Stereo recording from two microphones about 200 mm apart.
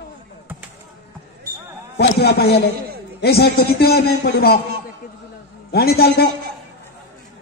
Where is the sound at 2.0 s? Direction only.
50° left (ahead or behind).